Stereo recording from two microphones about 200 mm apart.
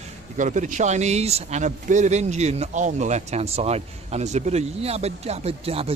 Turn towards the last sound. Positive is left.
turn(degrees=-30)  # may be behind; listen again after turning